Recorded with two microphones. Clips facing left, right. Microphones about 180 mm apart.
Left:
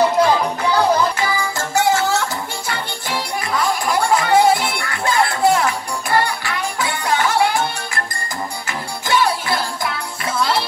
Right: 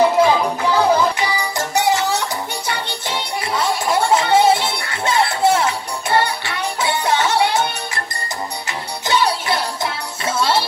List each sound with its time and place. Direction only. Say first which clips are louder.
0.2 s music: right 1 dB; 5° right (ahead or behind)
1.2 s music: even; 20° right (ahead or behind)
9.0 s music: even; 20° right (ahead or behind)